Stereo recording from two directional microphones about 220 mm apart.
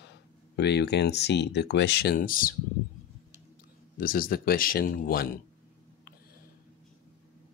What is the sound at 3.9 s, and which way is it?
Speech, 40° left (ahead or behind).